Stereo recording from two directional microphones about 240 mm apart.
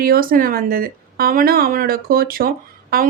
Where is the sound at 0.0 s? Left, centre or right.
Right.